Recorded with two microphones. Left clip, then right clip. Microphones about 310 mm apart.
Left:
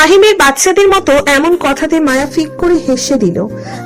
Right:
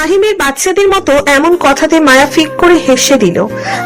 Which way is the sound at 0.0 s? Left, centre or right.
Centre.